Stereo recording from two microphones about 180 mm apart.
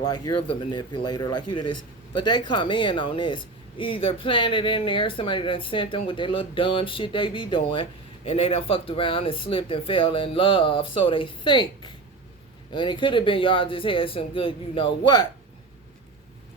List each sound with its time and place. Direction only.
0.0 s speech: 20° left (ahead or behind)